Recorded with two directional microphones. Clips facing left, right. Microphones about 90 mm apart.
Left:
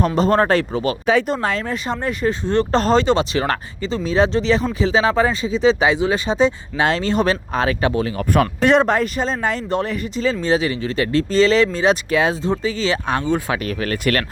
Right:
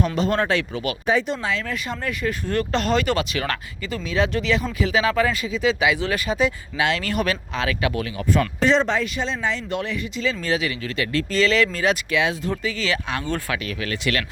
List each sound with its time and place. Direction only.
0.2 s speech: 35° left (ahead or behind)
1.3 s speech: 45° left (ahead or behind)
1.6 s speech: 30° left (ahead or behind)
8.2 s speech: 55° left (ahead or behind); by 11.9 s 30° left (ahead or behind)
12.1 s speech: 40° left (ahead or behind)